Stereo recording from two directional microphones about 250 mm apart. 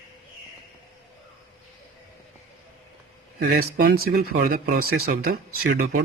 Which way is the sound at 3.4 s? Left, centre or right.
Right.